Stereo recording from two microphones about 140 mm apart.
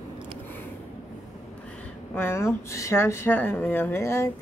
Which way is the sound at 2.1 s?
15° left (ahead or behind).